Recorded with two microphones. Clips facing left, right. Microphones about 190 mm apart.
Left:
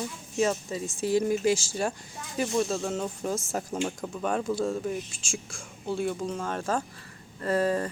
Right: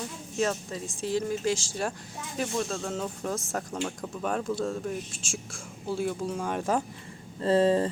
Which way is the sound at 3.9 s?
Centre (ahead or behind).